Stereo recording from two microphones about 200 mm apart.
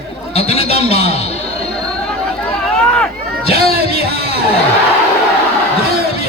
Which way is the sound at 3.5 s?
50° right (ahead or behind).